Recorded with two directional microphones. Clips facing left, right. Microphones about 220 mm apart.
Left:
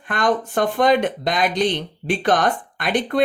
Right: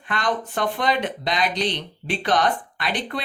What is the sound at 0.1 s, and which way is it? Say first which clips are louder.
Speech: left 5 dB; 50° left (ahead or behind).